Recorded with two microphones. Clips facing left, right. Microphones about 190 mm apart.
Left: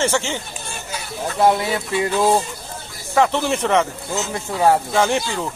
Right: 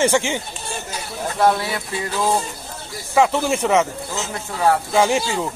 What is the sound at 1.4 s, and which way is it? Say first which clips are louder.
Speech: left 2 dB; 20° left (ahead or behind).